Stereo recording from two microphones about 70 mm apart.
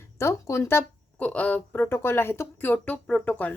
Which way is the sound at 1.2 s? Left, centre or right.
Centre.